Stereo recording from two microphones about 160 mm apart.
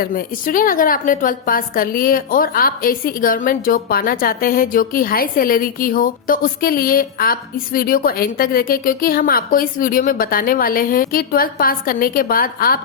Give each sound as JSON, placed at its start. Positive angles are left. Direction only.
{"t": 0.0, "sound": "a woman's voice", "side_deg": 60}